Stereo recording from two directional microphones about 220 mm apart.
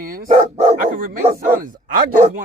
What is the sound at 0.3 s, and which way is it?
Dog, 30° right (ahead or behind).